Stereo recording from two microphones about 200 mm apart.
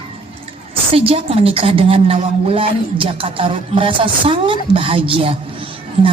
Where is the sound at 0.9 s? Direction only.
30° right (ahead or behind).